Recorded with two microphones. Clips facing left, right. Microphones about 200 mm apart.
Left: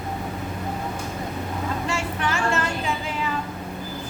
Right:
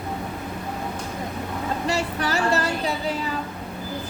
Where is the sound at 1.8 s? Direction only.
35° right (ahead or behind).